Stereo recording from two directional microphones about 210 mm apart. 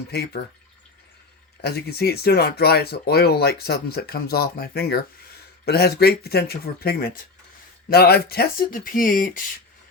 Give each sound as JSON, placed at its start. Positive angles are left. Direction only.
{"t": 1.6, "sound": "speech", "side_deg": 50}